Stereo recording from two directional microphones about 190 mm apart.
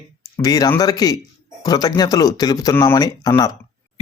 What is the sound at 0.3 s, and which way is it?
Speech, 20° left (ahead or behind).